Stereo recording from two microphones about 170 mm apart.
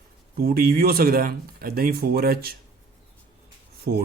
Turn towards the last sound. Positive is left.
turn(degrees=-80)